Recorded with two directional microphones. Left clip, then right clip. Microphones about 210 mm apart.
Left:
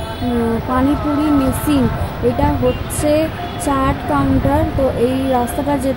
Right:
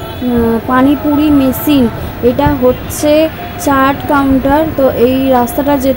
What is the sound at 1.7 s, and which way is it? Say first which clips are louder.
Speech: right 6 dB; centre (ahead or behind).